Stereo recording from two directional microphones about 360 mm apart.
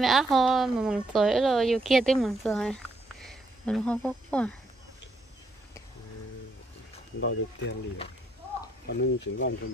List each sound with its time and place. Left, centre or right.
0.0 s a woman's voice: centre
7.2 s speech: left
9.0 s speech: left